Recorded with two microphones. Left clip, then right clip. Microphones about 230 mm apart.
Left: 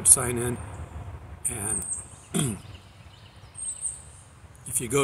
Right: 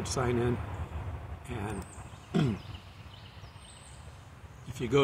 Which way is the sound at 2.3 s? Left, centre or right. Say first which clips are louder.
Left 1 dB; centre.